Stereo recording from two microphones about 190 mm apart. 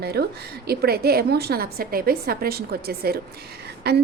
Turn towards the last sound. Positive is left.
turn(degrees=-60)  # may be behind; listen again after turning